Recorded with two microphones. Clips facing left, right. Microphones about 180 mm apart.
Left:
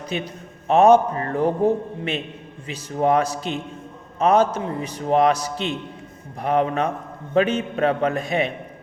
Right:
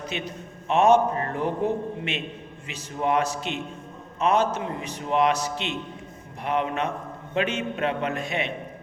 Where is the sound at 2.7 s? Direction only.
35° left (ahead or behind).